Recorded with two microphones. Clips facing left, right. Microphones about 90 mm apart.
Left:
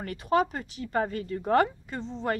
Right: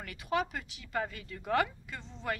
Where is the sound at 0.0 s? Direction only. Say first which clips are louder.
Left 8 dB; 40° left (ahead or behind).